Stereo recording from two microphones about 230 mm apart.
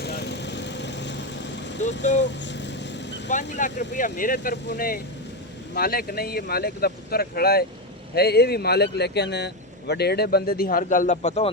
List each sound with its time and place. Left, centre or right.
0.0 s vehicle: left
3.2 s speech: left